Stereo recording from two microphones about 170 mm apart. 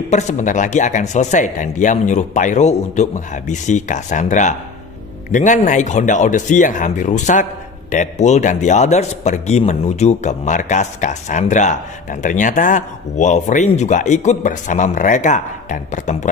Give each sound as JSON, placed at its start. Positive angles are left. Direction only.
{"t": 0.1, "sound": "speech", "side_deg": 45}